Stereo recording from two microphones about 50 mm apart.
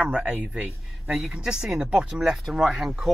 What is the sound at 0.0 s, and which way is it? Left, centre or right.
Speech, right.